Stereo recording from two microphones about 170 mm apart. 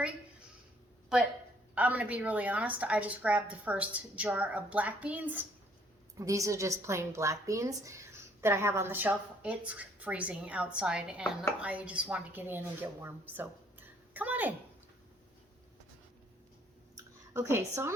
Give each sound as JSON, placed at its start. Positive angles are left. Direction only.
{"t": 1.7, "sound": "a woman's voice", "side_deg": -10}
{"t": 17.3, "sound": "a woman's voice", "side_deg": -15}